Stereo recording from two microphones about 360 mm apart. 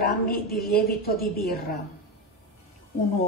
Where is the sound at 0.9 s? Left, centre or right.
Left.